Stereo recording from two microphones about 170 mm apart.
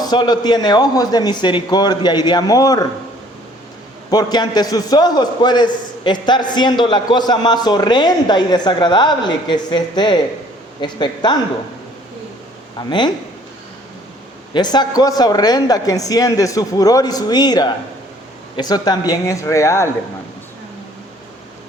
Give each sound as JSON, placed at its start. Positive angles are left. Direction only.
{"t": 0.0, "sound": "a man's voice", "side_deg": 25}
{"t": 4.1, "sound": "a man's voice", "side_deg": 25}
{"t": 14.5, "sound": "a man's voice", "side_deg": 25}